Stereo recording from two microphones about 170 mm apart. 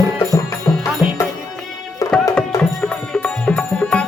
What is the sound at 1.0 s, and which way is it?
Music, 10° right (ahead or behind).